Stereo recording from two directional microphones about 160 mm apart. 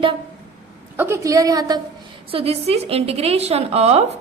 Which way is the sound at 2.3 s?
35° right (ahead or behind).